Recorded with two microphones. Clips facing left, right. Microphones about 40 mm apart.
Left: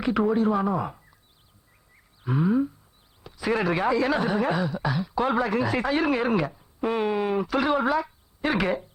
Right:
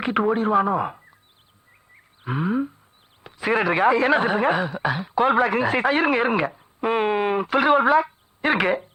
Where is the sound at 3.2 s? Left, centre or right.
Right.